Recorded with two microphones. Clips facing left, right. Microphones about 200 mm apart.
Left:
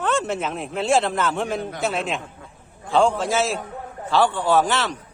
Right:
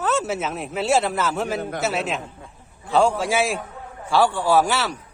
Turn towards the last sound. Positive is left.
turn(degrees=-10)  # may be behind; listen again after turning